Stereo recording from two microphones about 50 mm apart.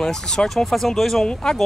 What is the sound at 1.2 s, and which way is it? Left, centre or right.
Speech, centre.